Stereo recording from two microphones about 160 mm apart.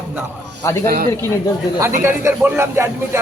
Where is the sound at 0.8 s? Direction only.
70° right (ahead or behind).